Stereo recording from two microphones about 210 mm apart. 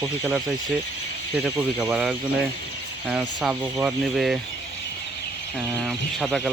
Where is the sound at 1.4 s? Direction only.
5° right (ahead or behind).